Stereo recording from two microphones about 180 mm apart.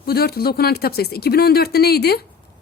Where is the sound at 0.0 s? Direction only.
60° left (ahead or behind).